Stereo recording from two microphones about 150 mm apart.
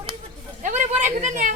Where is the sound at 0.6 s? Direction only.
55° right (ahead or behind).